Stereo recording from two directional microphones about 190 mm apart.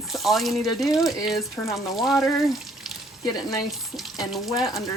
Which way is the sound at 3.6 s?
Centre (ahead or behind).